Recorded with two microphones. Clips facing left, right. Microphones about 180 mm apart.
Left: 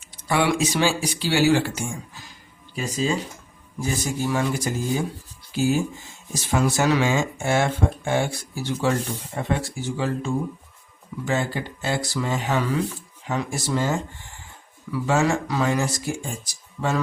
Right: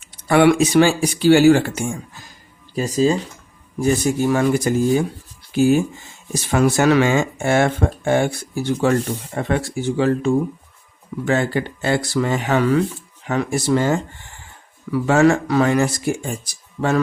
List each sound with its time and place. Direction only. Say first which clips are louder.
0.3 s speech: right 8 dB; 55° right (ahead or behind)
2.7 s speech: right 7 dB; 40° right (ahead or behind)
3.8 s speech: right 8 dB; 55° right (ahead or behind)
9.3 s speech: right 5 dB; 65° right (ahead or behind)